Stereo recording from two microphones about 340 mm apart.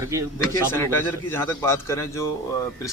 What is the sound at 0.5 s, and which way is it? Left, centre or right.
Speech, centre.